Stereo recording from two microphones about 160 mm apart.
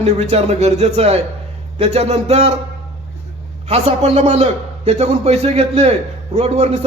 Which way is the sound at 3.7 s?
40° right (ahead or behind).